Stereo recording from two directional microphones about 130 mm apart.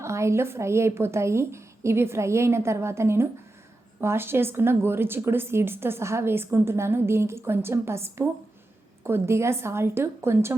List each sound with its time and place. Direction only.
0.0 s speech: 20° right (ahead or behind)